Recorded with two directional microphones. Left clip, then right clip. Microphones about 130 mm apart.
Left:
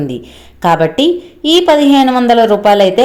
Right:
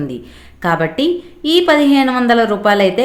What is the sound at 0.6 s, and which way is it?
A woman's voice, 25° left (ahead or behind).